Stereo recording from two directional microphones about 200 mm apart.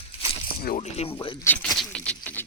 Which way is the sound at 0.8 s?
30° left (ahead or behind).